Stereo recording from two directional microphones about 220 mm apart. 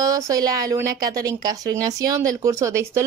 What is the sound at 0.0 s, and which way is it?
Speech, 15° right (ahead or behind).